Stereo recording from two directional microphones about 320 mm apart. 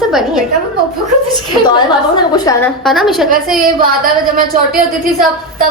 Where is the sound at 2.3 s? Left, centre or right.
Centre.